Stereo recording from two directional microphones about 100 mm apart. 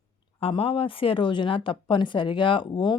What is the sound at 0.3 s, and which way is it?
Speech, 65° left (ahead or behind).